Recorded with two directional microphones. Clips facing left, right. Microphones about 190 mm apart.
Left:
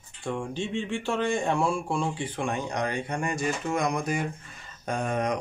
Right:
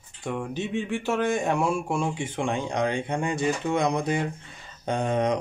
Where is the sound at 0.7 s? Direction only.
10° right (ahead or behind).